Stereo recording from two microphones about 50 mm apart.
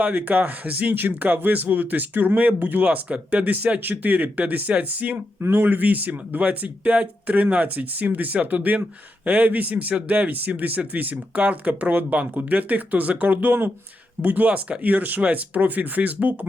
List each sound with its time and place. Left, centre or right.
0.0 s speech: right
5.4 s speech: right